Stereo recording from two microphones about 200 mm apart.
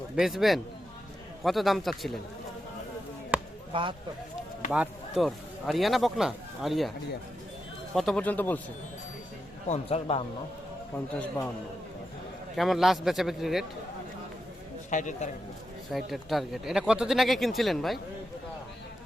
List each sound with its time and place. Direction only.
0.2 s speech: centre (ahead or behind)
3.3 s basketball bounce: 10° right (ahead or behind)
3.7 s speech: 25° right (ahead or behind)
4.7 s speech: 5° right (ahead or behind)
7.9 s speech: 5° left (ahead or behind)
9.6 s speech: 35° left (ahead or behind)
12.5 s speech: centre (ahead or behind)
14.8 s a man's voice: 40° left (ahead or behind)
15.9 s speech: centre (ahead or behind)